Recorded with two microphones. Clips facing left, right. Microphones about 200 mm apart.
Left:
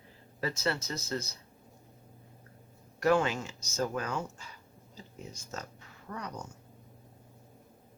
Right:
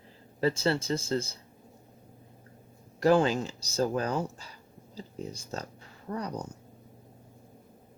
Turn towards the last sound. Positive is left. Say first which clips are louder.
# right 6 dB
turn(degrees=-35)  # may be behind; listen again after turning